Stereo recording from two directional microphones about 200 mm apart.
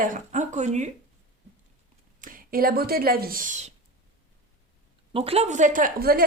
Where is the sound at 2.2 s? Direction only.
45° right (ahead or behind).